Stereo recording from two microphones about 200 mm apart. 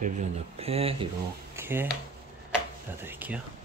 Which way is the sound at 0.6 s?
30° right (ahead or behind).